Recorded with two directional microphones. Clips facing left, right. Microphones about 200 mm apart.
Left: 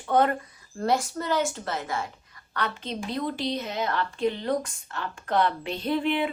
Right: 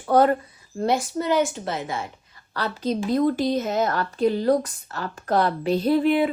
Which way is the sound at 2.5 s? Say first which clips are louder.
Right 6 dB; 35° right (ahead or behind).